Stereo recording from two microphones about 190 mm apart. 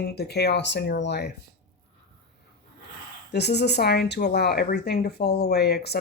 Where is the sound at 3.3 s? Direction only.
60° left (ahead or behind).